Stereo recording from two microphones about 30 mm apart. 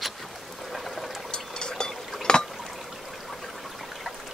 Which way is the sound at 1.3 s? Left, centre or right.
Left.